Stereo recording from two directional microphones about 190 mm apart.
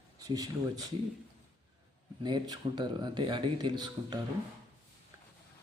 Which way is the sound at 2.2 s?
20° right (ahead or behind).